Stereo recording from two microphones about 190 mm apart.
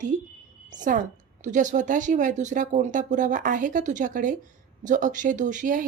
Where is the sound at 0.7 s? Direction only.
45° right (ahead or behind).